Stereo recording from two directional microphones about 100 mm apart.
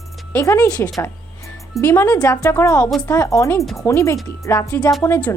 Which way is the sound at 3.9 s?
30° left (ahead or behind).